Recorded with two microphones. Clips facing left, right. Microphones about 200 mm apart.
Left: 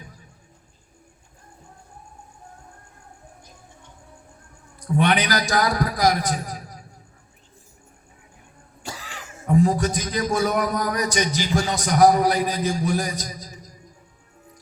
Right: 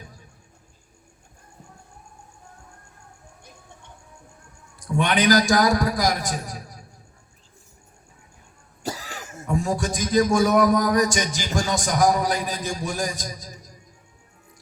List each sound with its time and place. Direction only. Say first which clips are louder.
4.9 s speech: right 2 dB; 45° right (ahead or behind)
8.8 s speech: right 5 dB; 40° right (ahead or behind)